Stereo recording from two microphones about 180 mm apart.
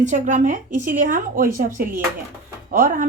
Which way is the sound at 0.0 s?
45° right (ahead or behind).